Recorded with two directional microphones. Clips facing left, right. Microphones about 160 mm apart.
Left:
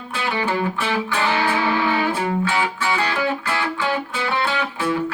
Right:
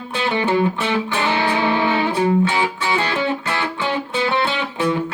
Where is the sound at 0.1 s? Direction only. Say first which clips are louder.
Right 4 dB; 20° right (ahead or behind).